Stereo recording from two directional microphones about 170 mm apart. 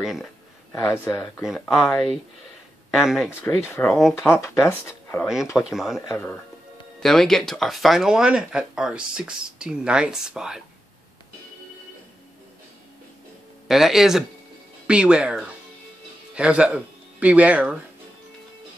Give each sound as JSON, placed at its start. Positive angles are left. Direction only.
{"t": 0.0, "sound": "a sound", "side_deg": 0}
{"t": 0.7, "sound": "speech", "side_deg": 15}
{"t": 1.4, "sound": "speech", "side_deg": 0}
{"t": 3.3, "sound": "speech", "side_deg": 15}
{"t": 5.6, "sound": "speech", "side_deg": -5}
{"t": 5.9, "sound": "speech", "side_deg": 15}
{"t": 7.0, "sound": "speech", "side_deg": 0}
{"t": 13.7, "sound": "speech", "side_deg": 0}